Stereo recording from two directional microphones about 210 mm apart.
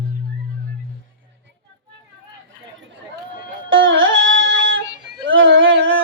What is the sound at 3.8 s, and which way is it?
Music, 65° right (ahead or behind).